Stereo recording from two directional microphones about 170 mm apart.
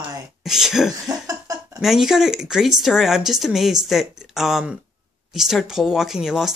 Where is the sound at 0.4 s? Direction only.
Centre (ahead or behind).